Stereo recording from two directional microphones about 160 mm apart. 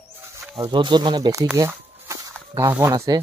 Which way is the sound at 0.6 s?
30° right (ahead or behind).